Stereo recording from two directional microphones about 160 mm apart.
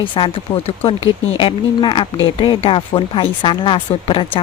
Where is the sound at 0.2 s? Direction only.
30° left (ahead or behind).